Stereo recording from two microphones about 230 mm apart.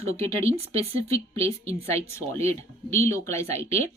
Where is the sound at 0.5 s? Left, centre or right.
Right.